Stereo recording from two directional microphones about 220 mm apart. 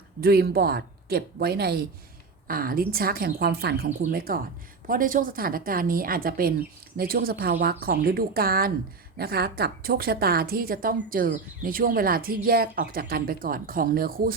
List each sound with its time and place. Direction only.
0.2 s a woman's voice: 45° right (ahead or behind)